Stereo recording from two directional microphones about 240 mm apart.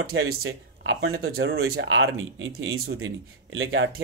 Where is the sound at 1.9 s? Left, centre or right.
Right.